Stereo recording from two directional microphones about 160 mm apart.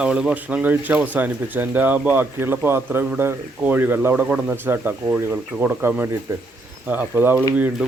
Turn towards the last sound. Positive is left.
turn(degrees=-10)  # may be behind; listen again after turning